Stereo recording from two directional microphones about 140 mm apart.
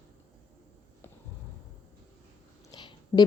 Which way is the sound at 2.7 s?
30° left (ahead or behind).